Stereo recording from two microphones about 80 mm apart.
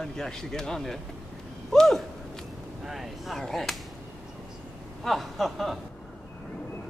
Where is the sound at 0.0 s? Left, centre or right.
Centre.